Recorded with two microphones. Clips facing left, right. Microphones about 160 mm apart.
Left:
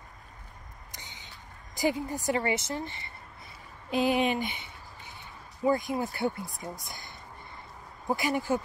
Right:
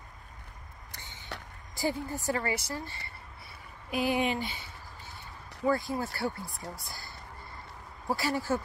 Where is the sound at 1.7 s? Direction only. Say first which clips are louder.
Left 3 dB; 20° left (ahead or behind).